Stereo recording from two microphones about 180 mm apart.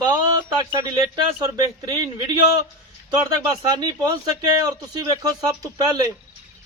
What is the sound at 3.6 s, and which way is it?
Speech, 20° right (ahead or behind).